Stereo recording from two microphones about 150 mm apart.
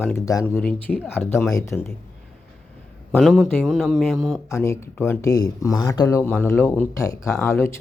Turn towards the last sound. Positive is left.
turn(degrees=20)  # may be behind; listen again after turning